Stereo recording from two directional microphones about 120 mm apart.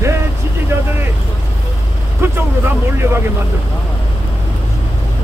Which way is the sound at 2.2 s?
20° right (ahead or behind).